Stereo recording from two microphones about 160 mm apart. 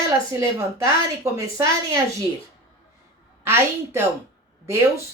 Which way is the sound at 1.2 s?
20° right (ahead or behind).